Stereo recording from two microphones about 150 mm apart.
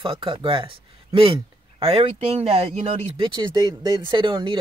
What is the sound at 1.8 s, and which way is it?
Speech, 40° right (ahead or behind).